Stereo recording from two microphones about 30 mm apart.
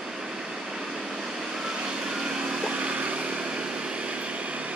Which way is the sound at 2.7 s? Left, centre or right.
Right.